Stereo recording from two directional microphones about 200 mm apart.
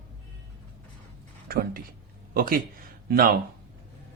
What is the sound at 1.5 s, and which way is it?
Speech, 50° right (ahead or behind).